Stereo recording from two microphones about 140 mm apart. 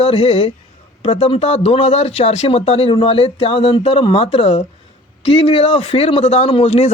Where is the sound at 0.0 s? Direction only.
45° left (ahead or behind).